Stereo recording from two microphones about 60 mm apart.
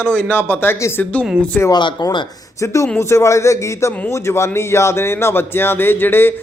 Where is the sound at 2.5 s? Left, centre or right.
Left.